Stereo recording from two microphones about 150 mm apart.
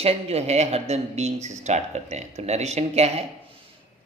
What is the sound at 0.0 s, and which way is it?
A man's voice, 45° right (ahead or behind).